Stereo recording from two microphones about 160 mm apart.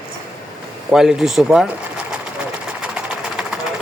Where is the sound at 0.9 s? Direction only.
5° right (ahead or behind).